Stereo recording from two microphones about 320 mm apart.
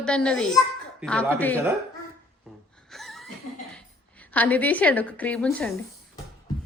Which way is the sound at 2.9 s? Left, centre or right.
Centre.